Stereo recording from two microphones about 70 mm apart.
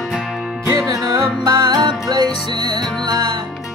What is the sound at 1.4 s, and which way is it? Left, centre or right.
Music, right.